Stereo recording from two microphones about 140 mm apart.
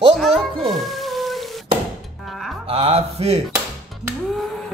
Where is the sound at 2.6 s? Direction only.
45° right (ahead or behind).